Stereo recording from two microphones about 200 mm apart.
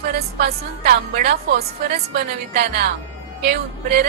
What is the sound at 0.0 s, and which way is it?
A woman's voice, 50° right (ahead or behind).